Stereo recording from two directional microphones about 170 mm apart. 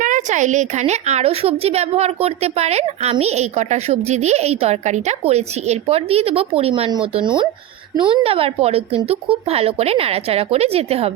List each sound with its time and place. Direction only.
0.0 s a woman's voice: 50° right (ahead or behind)